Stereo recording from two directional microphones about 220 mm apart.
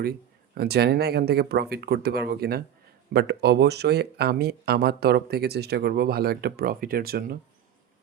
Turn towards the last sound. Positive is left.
turn(degrees=-45)  # may be behind; listen again after turning